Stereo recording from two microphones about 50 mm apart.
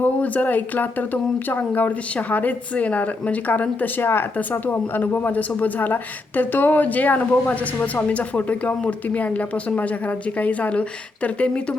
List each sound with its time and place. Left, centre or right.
0.0 s speech: left
4.0 s speech: left
4.5 s speech: left
8.0 s speech: left